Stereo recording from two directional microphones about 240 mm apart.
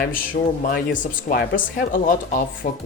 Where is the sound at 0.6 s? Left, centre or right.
Left.